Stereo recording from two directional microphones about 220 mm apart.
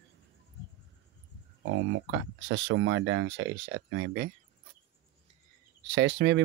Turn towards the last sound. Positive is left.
turn(degrees=-55)  # may be behind; listen again after turning